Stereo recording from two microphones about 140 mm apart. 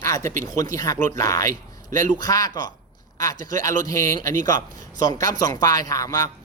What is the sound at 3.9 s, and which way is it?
Speech, 25° left (ahead or behind).